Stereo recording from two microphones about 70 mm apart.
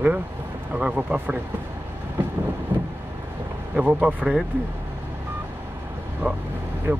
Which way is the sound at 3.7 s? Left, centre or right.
Centre.